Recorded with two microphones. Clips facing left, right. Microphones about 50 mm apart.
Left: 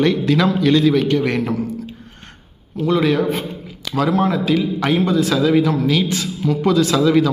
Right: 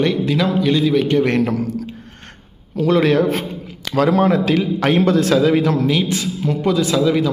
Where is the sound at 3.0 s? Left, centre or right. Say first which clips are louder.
Right 2 dB; right.